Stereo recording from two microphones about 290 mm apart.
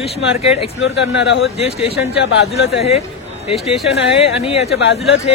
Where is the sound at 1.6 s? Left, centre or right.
Left.